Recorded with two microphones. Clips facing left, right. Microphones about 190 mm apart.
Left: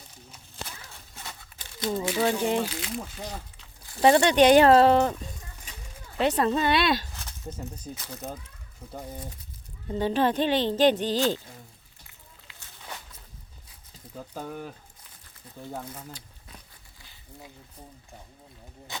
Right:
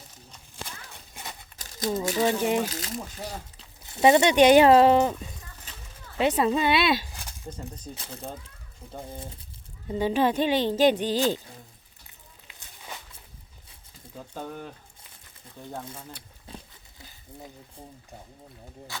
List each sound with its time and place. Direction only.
0.9 s horse: 15° right (ahead or behind)
1.5 s crumpling: 40° right (ahead or behind)
2.4 s speech: 10° right (ahead or behind)
2.6 s speech: 40° right (ahead or behind)
3.8 s speech: 20° right (ahead or behind)
7.9 s speech: 30° right (ahead or behind)
9.9 s speech: 10° right (ahead or behind)
14.3 s speech: 5° left (ahead or behind)
16.5 s a sound: 30° right (ahead or behind)